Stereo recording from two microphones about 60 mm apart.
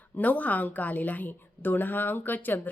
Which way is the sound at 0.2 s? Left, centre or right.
Left.